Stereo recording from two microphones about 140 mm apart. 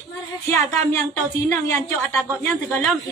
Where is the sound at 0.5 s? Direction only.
20° left (ahead or behind).